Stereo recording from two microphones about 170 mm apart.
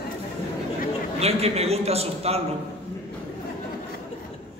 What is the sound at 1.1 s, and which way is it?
Speech, 35° right (ahead or behind).